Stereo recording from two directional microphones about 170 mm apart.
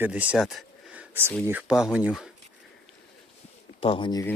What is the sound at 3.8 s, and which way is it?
Speech, 30° left (ahead or behind).